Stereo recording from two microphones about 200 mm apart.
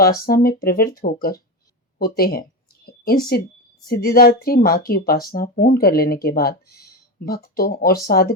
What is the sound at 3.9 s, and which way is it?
Speech, 50° left (ahead or behind).